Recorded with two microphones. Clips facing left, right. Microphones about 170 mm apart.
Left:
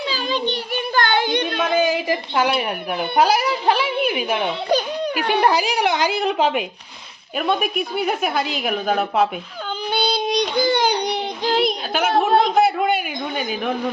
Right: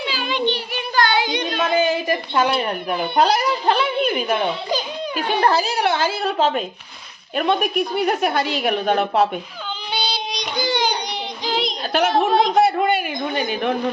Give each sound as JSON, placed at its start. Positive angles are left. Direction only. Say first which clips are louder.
{"t": 0.1, "sound": "a child's voice", "louder": "right 2 dB", "side_deg": 40}
{"t": 0.9, "sound": "a sound", "louder": "even", "side_deg": 55}
{"t": 1.6, "sound": "a woman's voice", "louder": "right 1 dB", "side_deg": 10}
{"t": 4.7, "sound": "music", "louder": "left 5 dB", "side_deg": 60}
{"t": 5.1, "sound": "speech", "louder": "even", "side_deg": 10}
{"t": 7.3, "sound": "a woman's voice", "louder": "right 2 dB", "side_deg": 0}
{"t": 9.9, "sound": "child singing", "louder": "left 7 dB", "side_deg": 55}
{"t": 11.9, "sound": "a sound", "louder": "right 1 dB", "side_deg": 0}